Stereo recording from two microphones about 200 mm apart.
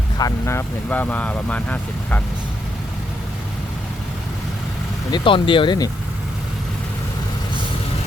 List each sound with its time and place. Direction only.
0.2 s speech: 15° left (ahead or behind)
5.1 s speech: 25° left (ahead or behind)